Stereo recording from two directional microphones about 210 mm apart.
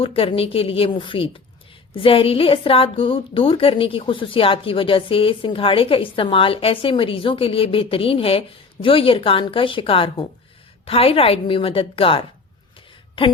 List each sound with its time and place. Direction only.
0.0 s a woman's voice: 25° left (ahead or behind)